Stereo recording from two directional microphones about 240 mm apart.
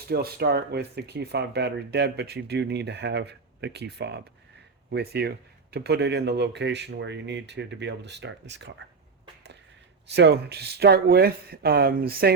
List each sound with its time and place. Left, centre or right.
0.1 s speech: right
10.1 s speech: right